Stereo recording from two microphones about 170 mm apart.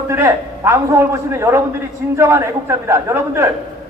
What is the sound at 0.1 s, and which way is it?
A man's voice, 15° right (ahead or behind).